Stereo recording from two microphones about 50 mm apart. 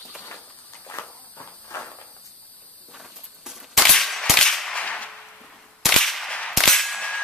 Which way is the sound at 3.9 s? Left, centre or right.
Centre.